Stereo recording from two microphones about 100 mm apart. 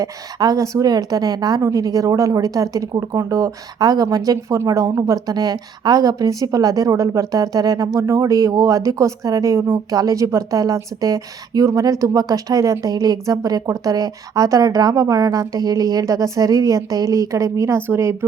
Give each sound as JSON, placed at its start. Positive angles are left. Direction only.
{"t": 0.0, "sound": "a woman's voice", "side_deg": -40}